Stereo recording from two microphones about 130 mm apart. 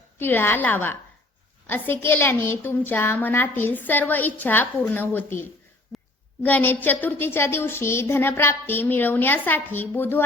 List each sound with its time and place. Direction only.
0.2 s a woman's voice: 15° left (ahead or behind)
5.9 s a sound: centre (ahead or behind)
6.4 s a woman's voice: 15° left (ahead or behind)